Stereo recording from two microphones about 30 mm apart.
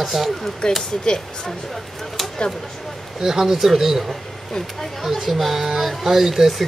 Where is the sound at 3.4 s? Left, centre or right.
Centre.